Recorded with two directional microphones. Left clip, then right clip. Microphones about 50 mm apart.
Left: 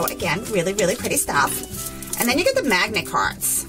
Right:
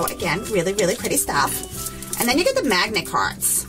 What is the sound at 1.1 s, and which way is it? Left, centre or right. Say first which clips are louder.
Speech: left 1 dB; right.